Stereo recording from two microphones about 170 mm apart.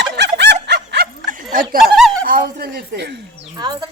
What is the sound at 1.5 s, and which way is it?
A man's voice, 55° right (ahead or behind).